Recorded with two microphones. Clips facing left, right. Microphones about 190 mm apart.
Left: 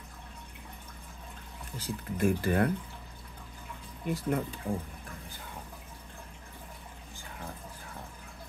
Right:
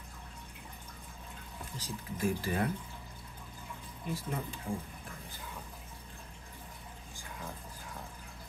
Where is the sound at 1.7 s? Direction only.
55° left (ahead or behind).